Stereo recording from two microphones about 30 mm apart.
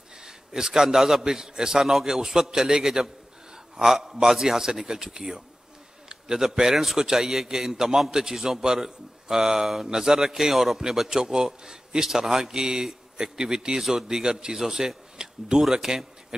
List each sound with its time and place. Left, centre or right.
0.2 s a sound: right
0.8 s speech: centre
1.3 s speech: centre
6.0 s a sound: right
6.7 s a man's voice: centre
10.8 s a man's voice: centre
14.2 s speech: right
14.5 s speech: centre